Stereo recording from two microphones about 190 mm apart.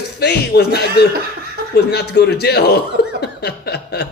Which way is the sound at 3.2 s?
60° left (ahead or behind).